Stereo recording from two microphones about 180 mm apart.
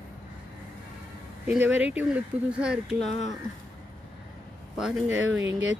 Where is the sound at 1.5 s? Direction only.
10° right (ahead or behind).